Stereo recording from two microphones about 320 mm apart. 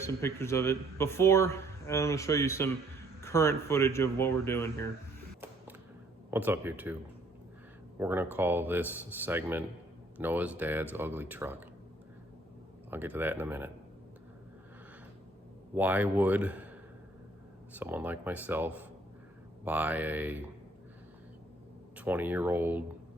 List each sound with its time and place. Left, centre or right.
0.0 s a man's voice: centre
6.3 s speech: centre
7.9 s speech: centre
12.9 s speech: centre
15.7 s speech: centre
17.7 s speech: centre
21.9 s speech: centre